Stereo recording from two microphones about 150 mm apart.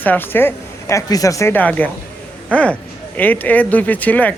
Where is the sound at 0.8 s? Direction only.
25° left (ahead or behind).